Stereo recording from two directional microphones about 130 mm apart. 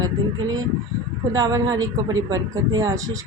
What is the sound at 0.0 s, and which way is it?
Speech, 25° right (ahead or behind).